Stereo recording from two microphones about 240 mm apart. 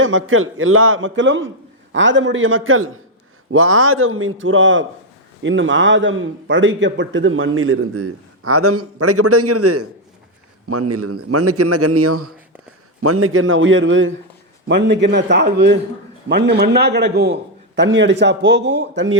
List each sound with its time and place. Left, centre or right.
0.0 s a man's voice: right